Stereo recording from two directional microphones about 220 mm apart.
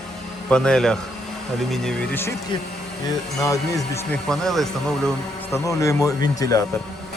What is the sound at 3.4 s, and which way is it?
Speech, 15° left (ahead or behind).